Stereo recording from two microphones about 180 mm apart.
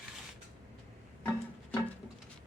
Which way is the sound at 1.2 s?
10° left (ahead or behind).